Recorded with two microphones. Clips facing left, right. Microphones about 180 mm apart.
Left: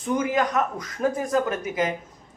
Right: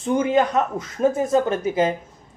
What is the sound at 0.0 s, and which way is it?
Speech, 25° right (ahead or behind).